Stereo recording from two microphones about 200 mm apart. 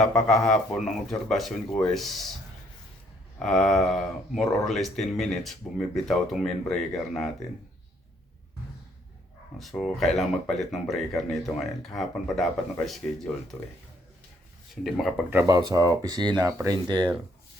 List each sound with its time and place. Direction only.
0.0 s speech: 5° left (ahead or behind)
3.3 s speech: centre (ahead or behind)
9.6 s speech: centre (ahead or behind)
14.8 s speech: centre (ahead or behind); by 17.2 s 25° right (ahead or behind)